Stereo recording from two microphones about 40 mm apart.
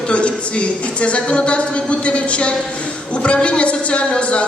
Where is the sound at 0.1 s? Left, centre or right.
Left.